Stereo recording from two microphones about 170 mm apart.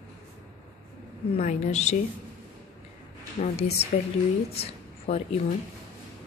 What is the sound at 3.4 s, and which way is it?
Speech, 40° left (ahead or behind).